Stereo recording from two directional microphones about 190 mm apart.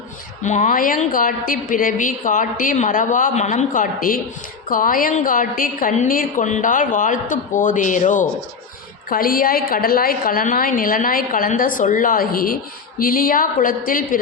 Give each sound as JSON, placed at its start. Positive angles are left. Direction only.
{"t": 0.4, "sound": "a woman's voice", "side_deg": 40}